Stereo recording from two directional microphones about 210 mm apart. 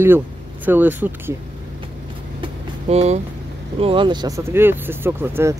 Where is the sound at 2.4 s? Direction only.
30° right (ahead or behind).